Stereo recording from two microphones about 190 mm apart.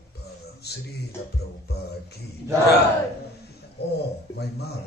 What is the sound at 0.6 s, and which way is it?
Speech, 60° left (ahead or behind).